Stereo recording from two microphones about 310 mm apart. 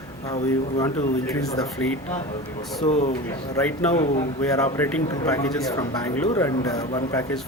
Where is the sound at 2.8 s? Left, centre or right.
Left.